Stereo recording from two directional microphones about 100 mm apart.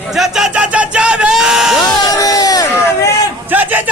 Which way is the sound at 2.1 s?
40° left (ahead or behind).